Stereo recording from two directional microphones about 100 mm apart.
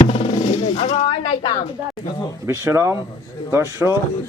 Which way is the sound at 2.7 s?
25° right (ahead or behind).